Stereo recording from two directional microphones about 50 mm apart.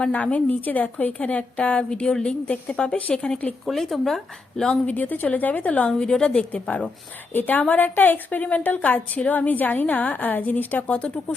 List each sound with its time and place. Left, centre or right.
0.0 s a woman's voice: left
1.9 s a woman's voice: centre
3.7 s speech: centre
4.9 s a woman's voice: left; by 6.4 s centre
6.5 s a woman's voice: left
10.8 s a woman's voice: left